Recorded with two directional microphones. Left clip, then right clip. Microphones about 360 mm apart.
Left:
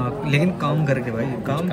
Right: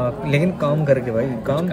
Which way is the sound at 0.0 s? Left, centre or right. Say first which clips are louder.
Right 2 dB; centre.